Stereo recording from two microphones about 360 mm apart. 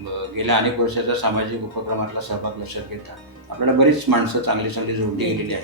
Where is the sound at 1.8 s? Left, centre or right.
Right.